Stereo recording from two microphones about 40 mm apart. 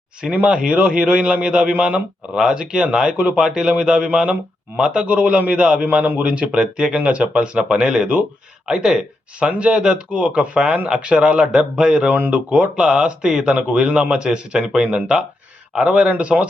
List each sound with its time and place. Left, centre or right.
0.2 s speech: right
2.3 s speech: centre
6.0 s a man's voice: right
6.2 s speech: right
9.5 s speech: right